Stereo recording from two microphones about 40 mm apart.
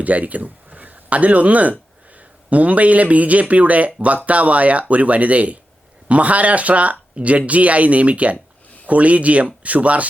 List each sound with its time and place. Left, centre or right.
0.0 s speech: right